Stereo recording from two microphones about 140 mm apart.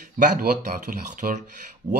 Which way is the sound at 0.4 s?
75° right (ahead or behind).